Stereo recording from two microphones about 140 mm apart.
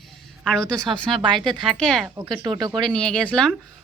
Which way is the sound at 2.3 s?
30° right (ahead or behind).